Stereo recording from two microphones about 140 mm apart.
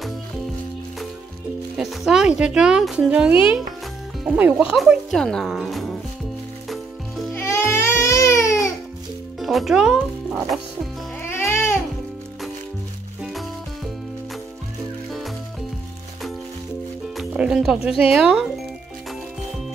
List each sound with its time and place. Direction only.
1.8 s speech: 5° right (ahead or behind)
7.3 s baby cry: 15° left (ahead or behind)
9.4 s speech: centre (ahead or behind)
11.2 s music: 15° left (ahead or behind)
13.2 s music: centre (ahead or behind)
17.2 s speech: 5° right (ahead or behind)